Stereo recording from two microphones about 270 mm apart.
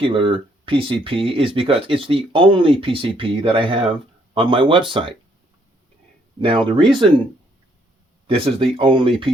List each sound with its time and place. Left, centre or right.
0.0 s speech: centre
6.4 s speech: centre
8.3 s speech: right